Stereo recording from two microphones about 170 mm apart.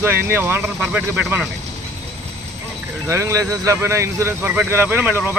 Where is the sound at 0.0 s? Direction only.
15° right (ahead or behind).